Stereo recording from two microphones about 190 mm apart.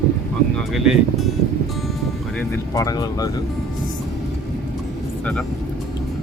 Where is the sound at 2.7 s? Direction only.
20° left (ahead or behind).